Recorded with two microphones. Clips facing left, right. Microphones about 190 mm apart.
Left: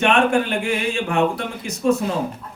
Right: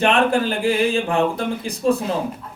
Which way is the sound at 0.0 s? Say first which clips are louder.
Even; 35° right (ahead or behind).